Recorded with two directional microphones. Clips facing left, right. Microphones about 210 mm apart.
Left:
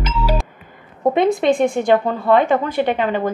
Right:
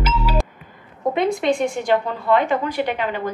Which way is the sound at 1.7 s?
50° left (ahead or behind).